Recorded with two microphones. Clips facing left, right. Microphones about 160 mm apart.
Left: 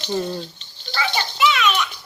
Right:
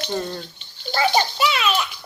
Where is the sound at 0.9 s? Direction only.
40° right (ahead or behind).